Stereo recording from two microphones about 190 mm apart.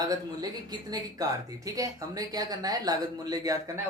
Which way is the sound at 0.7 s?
20° right (ahead or behind).